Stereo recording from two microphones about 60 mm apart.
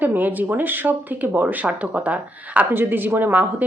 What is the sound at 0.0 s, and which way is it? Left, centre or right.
Speech, right.